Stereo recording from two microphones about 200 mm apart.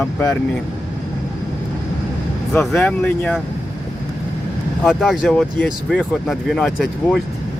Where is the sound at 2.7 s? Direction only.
10° left (ahead or behind).